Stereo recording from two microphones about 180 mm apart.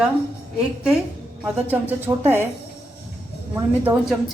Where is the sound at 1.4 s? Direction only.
10° right (ahead or behind).